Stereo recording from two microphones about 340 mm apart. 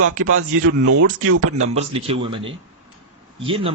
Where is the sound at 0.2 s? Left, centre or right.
Right.